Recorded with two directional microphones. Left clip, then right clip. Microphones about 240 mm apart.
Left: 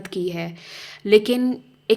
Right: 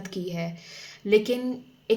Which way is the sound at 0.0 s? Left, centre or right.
Left.